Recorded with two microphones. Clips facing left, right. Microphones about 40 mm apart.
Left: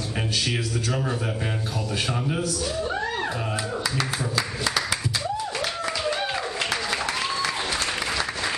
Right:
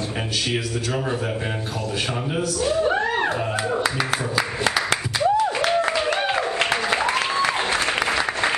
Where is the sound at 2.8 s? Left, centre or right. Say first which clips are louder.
Right 6 dB; right.